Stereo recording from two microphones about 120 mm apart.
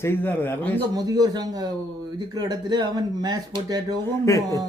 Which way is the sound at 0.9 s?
30° right (ahead or behind).